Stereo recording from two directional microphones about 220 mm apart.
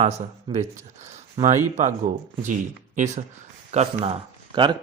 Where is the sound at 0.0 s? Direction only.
30° right (ahead or behind).